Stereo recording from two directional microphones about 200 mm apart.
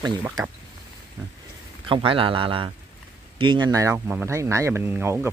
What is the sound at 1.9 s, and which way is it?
Speech, 25° right (ahead or behind).